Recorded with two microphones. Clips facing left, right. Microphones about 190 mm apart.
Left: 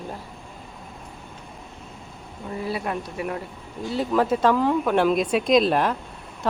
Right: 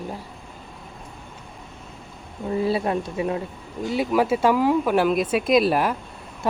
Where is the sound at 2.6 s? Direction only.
30° right (ahead or behind).